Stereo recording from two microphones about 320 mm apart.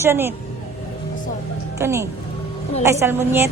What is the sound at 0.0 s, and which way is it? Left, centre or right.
Speech, centre.